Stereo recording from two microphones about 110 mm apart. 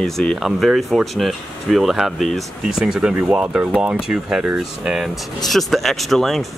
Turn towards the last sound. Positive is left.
turn(degrees=0)  # may be behind; listen again after turning